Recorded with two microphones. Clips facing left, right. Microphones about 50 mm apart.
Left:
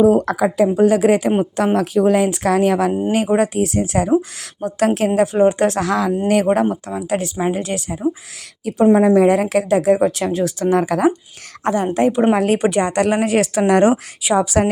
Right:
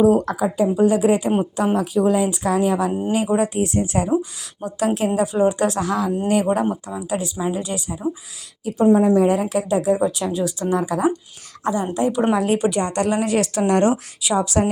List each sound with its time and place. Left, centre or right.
0.0 s speech: left
0.3 s speech: left
1.5 s a woman's voice: left
3.3 s speech: left
4.6 s speech: left
4.9 s speech: left
5.8 s speech: left
6.2 s a woman's voice: left
8.6 s speech: left
12.3 s a woman's voice: left
12.9 s a woman's voice: left